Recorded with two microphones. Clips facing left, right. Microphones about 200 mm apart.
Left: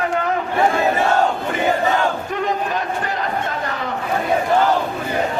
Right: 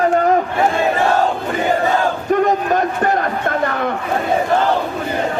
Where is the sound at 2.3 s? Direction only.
50° right (ahead or behind).